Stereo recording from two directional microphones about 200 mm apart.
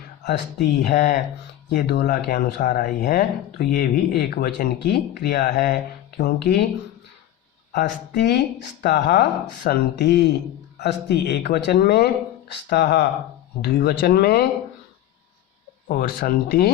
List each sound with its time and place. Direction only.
0.3 s speech: 50° left (ahead or behind)
7.7 s speech: 55° left (ahead or behind)
15.9 s speech: 45° left (ahead or behind)